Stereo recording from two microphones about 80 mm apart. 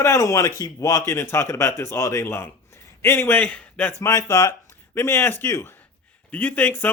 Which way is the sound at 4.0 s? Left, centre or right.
Left.